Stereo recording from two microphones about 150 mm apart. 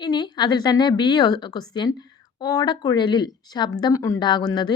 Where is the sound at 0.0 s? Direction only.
30° left (ahead or behind).